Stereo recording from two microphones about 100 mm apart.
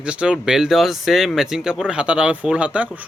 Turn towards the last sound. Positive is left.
turn(degrees=-15)  # may be behind; listen again after turning